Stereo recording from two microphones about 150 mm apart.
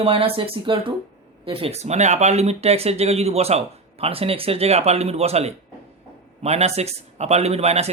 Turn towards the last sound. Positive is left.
turn(degrees=-45)  # may be behind; listen again after turning